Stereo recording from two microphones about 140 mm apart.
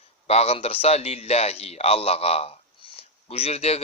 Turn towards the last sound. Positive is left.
turn(degrees=50)  # may be behind; listen again after turning